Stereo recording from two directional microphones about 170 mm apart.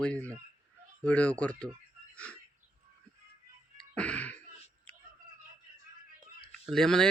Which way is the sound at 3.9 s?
5° left (ahead or behind).